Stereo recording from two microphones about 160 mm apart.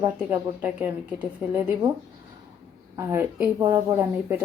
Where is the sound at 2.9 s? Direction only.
15° right (ahead or behind).